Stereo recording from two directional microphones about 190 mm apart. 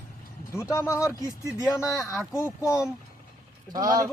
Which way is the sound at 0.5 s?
15° left (ahead or behind).